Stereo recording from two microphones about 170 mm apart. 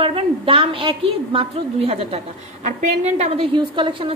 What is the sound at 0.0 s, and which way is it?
A woman's voice, 30° right (ahead or behind).